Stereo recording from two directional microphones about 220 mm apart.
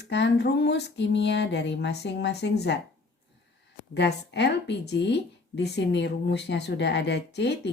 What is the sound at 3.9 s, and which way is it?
Speech, 50° left (ahead or behind).